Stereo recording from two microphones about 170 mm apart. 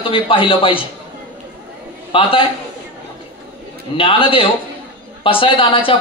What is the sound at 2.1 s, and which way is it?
Speech, 30° left (ahead or behind).